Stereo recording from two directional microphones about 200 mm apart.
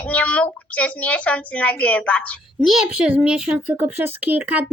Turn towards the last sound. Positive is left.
turn(degrees=-5)  # may be behind; listen again after turning